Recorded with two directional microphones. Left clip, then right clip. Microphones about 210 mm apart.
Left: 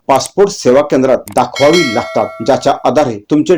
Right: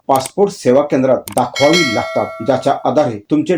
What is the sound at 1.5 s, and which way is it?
Speech, centre (ahead or behind).